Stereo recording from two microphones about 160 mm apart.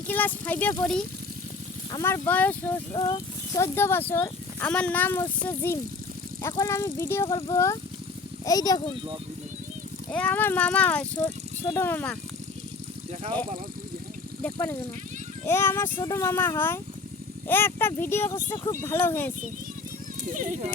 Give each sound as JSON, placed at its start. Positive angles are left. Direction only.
{"t": 0.1, "sound": "speech", "side_deg": 10}
{"t": 1.9, "sound": "speech", "side_deg": 20}
{"t": 2.9, "sound": "speech", "side_deg": 25}
{"t": 10.1, "sound": "speech", "side_deg": 10}
{"t": 14.4, "sound": "speech", "side_deg": 10}
{"t": 20.2, "sound": "speech", "side_deg": -55}